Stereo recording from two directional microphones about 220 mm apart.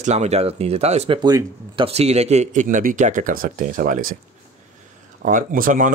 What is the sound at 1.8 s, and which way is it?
Speech, 30° right (ahead or behind).